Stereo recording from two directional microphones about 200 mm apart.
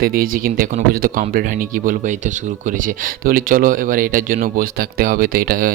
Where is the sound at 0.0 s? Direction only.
45° right (ahead or behind).